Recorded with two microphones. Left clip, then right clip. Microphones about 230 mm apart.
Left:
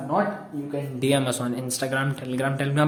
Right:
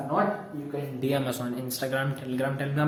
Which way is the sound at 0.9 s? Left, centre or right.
Left.